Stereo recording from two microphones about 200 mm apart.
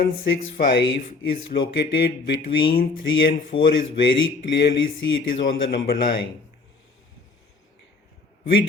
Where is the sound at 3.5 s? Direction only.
25° left (ahead or behind).